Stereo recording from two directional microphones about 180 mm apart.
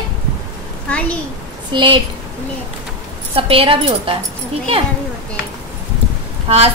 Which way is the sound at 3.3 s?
30° right (ahead or behind).